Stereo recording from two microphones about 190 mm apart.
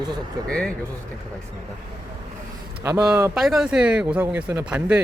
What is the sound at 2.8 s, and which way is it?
Speech, 15° right (ahead or behind).